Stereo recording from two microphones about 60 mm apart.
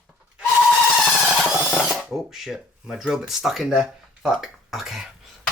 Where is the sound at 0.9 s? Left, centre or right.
Centre.